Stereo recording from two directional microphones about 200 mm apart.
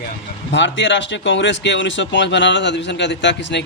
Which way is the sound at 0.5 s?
65° left (ahead or behind).